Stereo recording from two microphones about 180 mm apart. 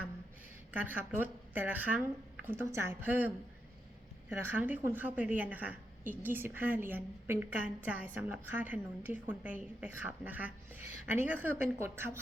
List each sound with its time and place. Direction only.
0.7 s a woman's voice: 10° right (ahead or behind)